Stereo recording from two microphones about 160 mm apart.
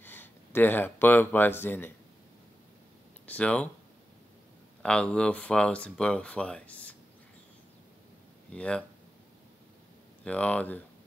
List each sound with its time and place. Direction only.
0.0 s speech: 10° left (ahead or behind)
3.3 s speech: 5° left (ahead or behind)
4.8 s speech: 5° left (ahead or behind)
8.5 s speech: 5° left (ahead or behind)
10.2 s speech: 10° left (ahead or behind)